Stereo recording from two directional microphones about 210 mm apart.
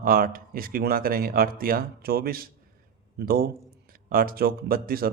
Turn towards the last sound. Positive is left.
turn(degrees=-45)  # may be behind; listen again after turning